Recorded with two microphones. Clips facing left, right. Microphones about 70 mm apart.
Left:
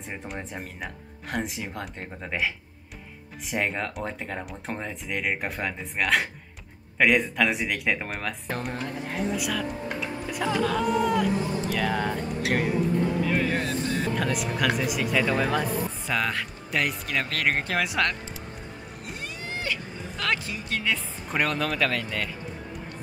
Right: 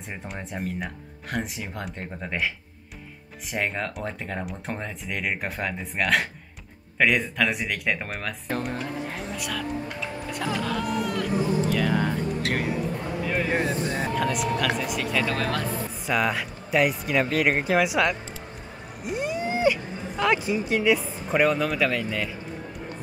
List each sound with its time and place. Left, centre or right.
0.1 s speech: centre
13.5 s speech: right
14.1 s speech: centre
16.1 s speech: centre
19.0 s a sound: centre
21.3 s speech: centre